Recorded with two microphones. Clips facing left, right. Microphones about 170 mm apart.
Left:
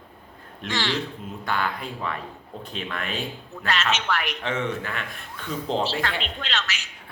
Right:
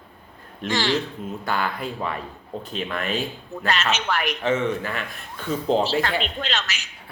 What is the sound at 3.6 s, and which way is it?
Speech, 40° right (ahead or behind).